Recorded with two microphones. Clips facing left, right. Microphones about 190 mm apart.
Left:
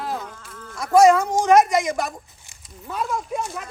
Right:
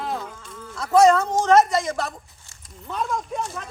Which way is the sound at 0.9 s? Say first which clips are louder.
Left 1 dB; 10° left (ahead or behind).